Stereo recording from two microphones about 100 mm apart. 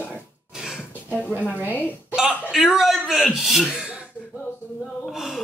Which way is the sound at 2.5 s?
5° right (ahead or behind).